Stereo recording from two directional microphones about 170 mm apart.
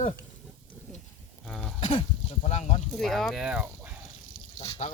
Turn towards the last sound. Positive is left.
turn(degrees=40)  # may be behind; listen again after turning